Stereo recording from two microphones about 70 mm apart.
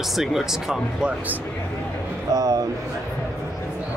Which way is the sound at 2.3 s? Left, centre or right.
Right.